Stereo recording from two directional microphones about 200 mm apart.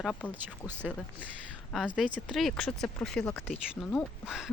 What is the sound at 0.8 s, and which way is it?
Speech, 5° right (ahead or behind).